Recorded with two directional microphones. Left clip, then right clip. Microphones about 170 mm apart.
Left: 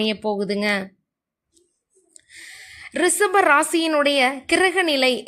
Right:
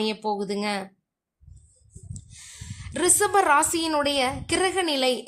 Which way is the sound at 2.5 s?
10° left (ahead or behind).